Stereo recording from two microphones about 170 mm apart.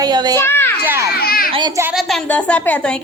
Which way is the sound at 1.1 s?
60° left (ahead or behind).